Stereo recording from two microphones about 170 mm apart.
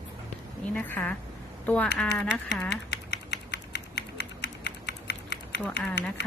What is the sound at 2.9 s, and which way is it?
Typing, 90° left.